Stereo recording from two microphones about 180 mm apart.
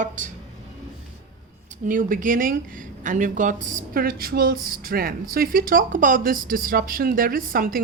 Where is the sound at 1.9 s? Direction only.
50° right (ahead or behind).